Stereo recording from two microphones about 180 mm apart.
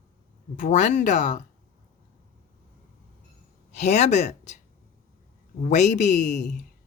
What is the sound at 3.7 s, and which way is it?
Speech, 40° left (ahead or behind).